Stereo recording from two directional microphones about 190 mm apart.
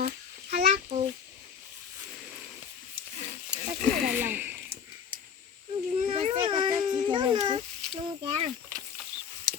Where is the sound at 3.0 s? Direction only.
55° right (ahead or behind).